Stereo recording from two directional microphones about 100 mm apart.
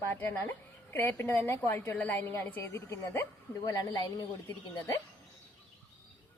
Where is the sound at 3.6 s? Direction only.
40° left (ahead or behind).